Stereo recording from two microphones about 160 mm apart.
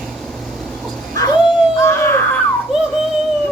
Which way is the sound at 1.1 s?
25° left (ahead or behind).